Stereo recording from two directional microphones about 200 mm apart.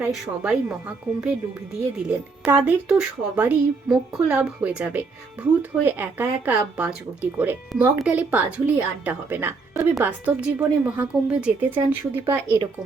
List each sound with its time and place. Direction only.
0.0 s a woman's voice: 5° right (ahead or behind)